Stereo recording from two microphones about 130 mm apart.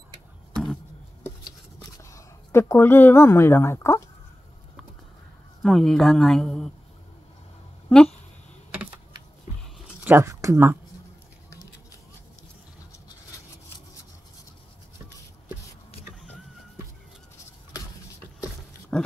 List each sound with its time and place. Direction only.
1.4 s writing: 25° left (ahead or behind)
5.6 s a woman's voice: centre (ahead or behind)
10.0 s speech: 20° right (ahead or behind)
18.9 s pig: 5° left (ahead or behind)